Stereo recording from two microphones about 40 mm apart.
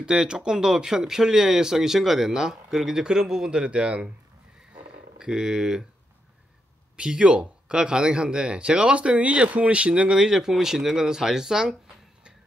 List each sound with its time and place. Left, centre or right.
0.0 s speech: centre
3.5 s speech: right
5.2 s speech: centre
7.0 s speech: right
10.2 s speech: centre